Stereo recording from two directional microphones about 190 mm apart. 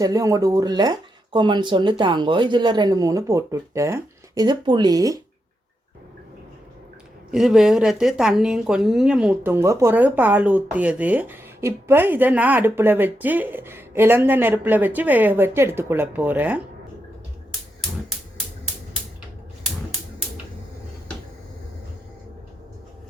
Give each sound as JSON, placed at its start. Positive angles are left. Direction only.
{"t": 0.0, "sound": "speech", "side_deg": -20}
{"t": 7.3, "sound": "a woman's voice", "side_deg": 0}